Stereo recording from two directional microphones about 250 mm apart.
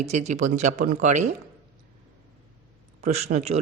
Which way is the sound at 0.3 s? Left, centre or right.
Right.